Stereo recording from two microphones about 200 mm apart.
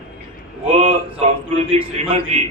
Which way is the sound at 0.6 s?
35° right (ahead or behind).